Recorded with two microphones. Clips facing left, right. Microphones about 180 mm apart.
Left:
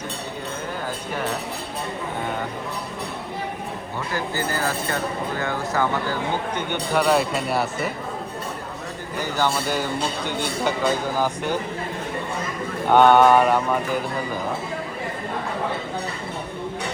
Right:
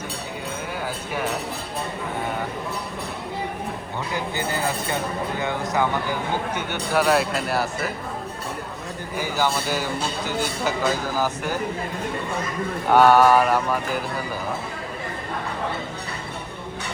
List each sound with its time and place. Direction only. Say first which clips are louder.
4.1 s speech: left 1 dB; 20° right (ahead or behind)
6.6 s speech: left 1 dB; 5° right (ahead or behind)
9.1 s speech: even; 10° right (ahead or behind)
12.9 s speech: left 1 dB; 5° right (ahead or behind)